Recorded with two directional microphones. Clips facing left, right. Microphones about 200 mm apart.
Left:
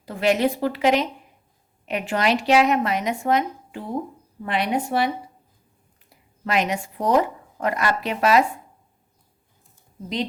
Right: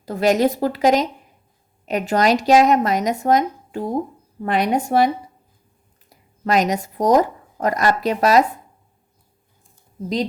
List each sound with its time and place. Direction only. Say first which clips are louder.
0.0 s speech: right 3 dB; 40° right (ahead or behind)